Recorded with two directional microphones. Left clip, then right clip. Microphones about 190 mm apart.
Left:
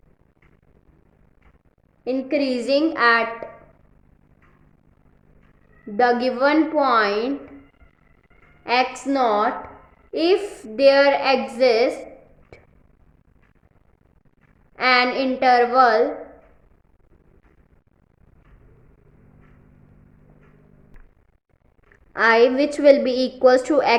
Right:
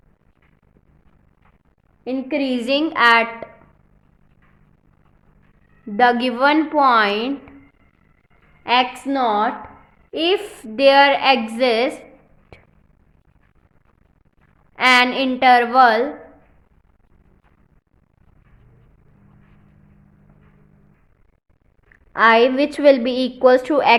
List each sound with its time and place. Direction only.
2.0 s a woman's voice: 25° right (ahead or behind)
6.0 s a woman's voice: 35° right (ahead or behind)
8.6 s a woman's voice: 30° right (ahead or behind)
12.5 s a sound: 35° right (ahead or behind)
14.8 s a woman's voice: 30° right (ahead or behind)
21.9 s a woman's voice: 20° right (ahead or behind)